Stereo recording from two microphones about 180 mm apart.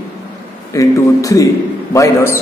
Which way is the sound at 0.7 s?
20° left (ahead or behind).